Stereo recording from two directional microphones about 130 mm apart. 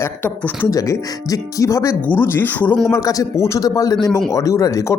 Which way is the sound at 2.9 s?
25° left (ahead or behind).